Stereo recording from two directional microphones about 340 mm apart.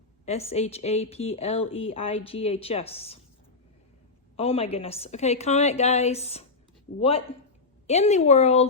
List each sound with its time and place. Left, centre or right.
0.3 s speech: centre
4.4 s a woman's voice: centre